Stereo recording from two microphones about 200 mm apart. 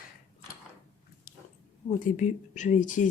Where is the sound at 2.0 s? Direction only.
40° left (ahead or behind).